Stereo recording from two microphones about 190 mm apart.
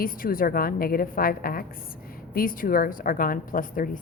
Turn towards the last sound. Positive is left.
turn(degrees=45)  # may be behind; listen again after turning